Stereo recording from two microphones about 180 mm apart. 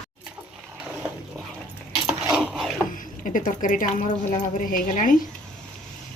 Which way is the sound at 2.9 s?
45° left (ahead or behind).